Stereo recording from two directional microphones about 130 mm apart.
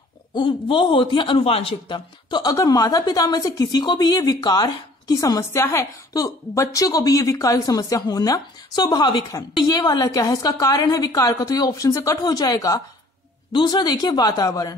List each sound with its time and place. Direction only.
0.3 s a man's voice: 40° left (ahead or behind)